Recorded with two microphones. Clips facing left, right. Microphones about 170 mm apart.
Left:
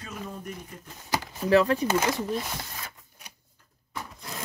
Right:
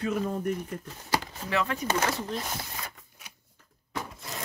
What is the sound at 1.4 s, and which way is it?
Speech, 35° left (ahead or behind).